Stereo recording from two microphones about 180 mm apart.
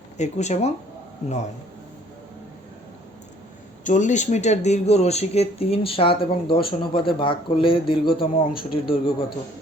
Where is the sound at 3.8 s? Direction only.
45° left (ahead or behind).